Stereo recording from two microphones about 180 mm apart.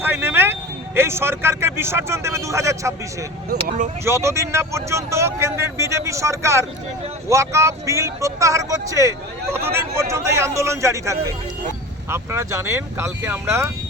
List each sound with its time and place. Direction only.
0.0 s a sound: 10° right (ahead or behind)
0.9 s speech: 15° right (ahead or behind)
4.0 s speech: 15° right (ahead or behind)